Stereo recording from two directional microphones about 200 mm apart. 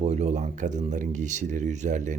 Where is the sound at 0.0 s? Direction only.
35° right (ahead or behind).